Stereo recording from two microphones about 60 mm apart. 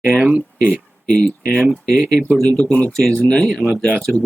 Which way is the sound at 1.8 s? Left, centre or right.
Centre.